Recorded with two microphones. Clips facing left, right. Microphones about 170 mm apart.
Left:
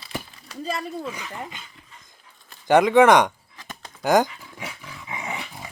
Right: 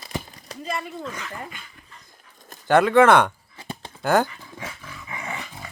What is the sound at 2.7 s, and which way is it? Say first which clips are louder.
Speech: left 1 dB; 15° left (ahead or behind).